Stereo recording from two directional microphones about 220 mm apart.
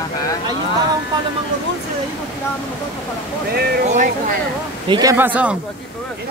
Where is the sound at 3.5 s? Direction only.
45° right (ahead or behind).